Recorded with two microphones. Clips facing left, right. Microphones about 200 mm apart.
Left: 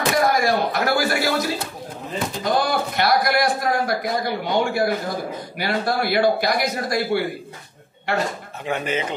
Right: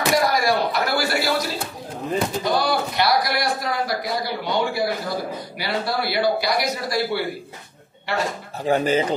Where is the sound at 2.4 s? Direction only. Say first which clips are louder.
Even; 50° left (ahead or behind).